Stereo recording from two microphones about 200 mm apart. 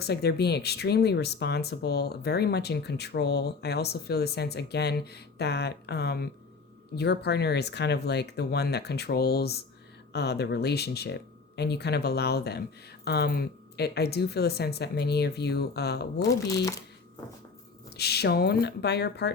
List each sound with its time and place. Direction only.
0.0 s speech: 55° left (ahead or behind)
17.9 s speech: 55° left (ahead or behind)